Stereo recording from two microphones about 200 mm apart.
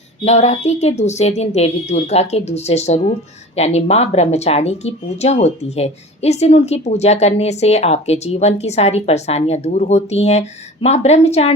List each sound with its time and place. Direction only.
0.3 s speech: 35° left (ahead or behind)